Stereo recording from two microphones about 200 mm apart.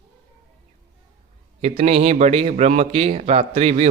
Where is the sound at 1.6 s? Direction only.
30° right (ahead or behind).